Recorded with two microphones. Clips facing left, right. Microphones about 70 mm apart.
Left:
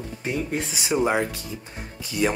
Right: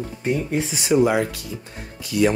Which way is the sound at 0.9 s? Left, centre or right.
Left.